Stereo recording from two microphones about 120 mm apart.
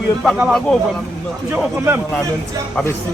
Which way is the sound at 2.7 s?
20° left (ahead or behind).